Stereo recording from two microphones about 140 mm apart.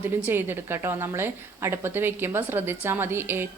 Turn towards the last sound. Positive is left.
turn(degrees=-15)  # may be behind; listen again after turning